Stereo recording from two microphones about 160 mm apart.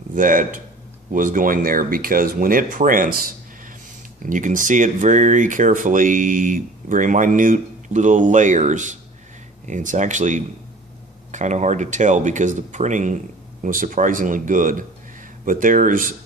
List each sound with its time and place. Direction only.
0.1 s speech: 55° right (ahead or behind)
4.3 s speech: 55° right (ahead or behind)